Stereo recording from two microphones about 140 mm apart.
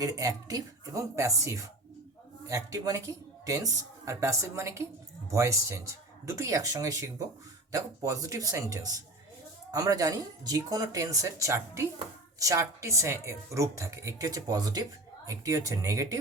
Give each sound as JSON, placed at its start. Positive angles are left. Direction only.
{"t": 0.0, "sound": "speech", "side_deg": -25}